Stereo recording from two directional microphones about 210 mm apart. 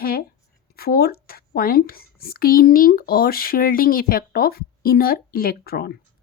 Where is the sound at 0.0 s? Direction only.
45° left (ahead or behind).